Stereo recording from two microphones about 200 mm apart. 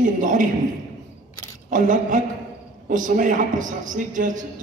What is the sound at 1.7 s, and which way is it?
A man's voice, 40° right (ahead or behind).